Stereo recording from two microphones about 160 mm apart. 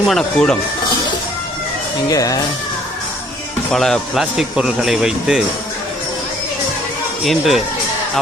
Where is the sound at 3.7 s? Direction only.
Centre (ahead or behind).